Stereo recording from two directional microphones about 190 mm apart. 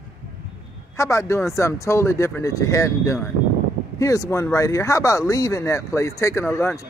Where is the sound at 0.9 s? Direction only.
15° left (ahead or behind).